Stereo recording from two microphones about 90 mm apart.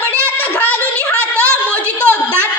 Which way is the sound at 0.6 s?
20° left (ahead or behind).